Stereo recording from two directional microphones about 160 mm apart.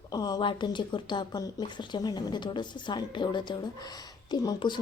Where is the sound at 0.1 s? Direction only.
25° left (ahead or behind).